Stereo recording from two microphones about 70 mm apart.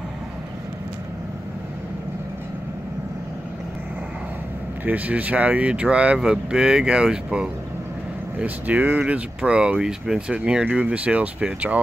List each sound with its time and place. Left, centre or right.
4.8 s speech: right